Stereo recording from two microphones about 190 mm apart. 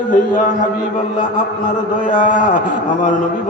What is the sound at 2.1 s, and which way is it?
Speech, 45° left (ahead or behind).